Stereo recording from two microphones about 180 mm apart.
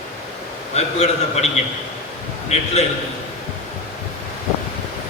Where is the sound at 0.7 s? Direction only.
35° left (ahead or behind).